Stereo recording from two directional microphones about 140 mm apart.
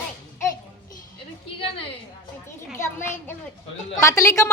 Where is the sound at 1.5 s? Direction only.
40° left (ahead or behind).